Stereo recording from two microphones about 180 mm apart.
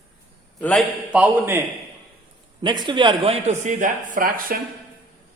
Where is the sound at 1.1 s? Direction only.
10° right (ahead or behind).